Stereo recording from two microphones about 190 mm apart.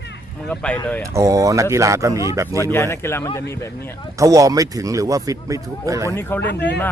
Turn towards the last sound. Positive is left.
turn(degrees=65)  # may be behind; listen again after turning